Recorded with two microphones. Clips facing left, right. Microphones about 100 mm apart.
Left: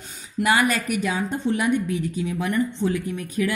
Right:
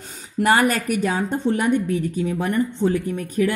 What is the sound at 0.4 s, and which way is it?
A woman's voice, 45° right (ahead or behind).